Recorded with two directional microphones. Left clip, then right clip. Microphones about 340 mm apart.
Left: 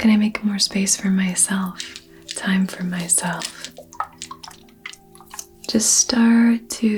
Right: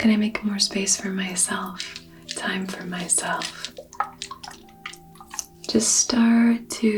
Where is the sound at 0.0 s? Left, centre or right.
Left.